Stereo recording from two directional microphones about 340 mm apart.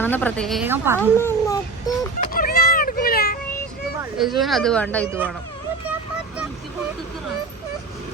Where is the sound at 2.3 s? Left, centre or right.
Left.